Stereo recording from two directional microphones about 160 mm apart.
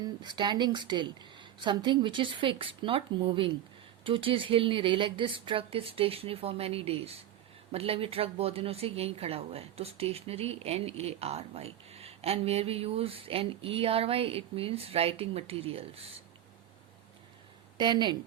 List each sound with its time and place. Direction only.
0.0 s a woman's voice: 30° right (ahead or behind)
17.7 s a woman's voice: 30° right (ahead or behind)